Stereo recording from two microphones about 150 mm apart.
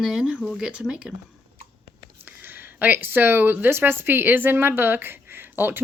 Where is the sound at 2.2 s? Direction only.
15° right (ahead or behind).